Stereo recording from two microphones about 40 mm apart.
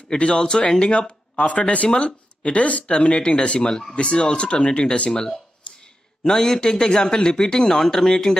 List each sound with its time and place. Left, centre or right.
0.1 s speech: left
1.4 s speech: left
6.2 s speech: centre